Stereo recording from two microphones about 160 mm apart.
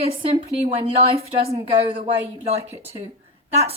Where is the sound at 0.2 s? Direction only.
35° right (ahead or behind).